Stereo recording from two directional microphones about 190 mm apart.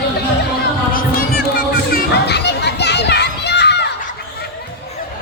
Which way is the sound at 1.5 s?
50° left (ahead or behind).